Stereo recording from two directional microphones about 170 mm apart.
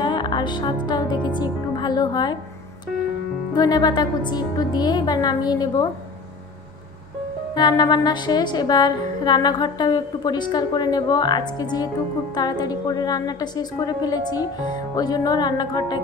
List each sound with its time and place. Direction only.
0.0 s music: 25° left (ahead or behind)
0.8 s a woman's voice: 25° left (ahead or behind)
3.5 s a woman's voice: 25° left (ahead or behind)
7.5 s a woman's voice: 25° left (ahead or behind)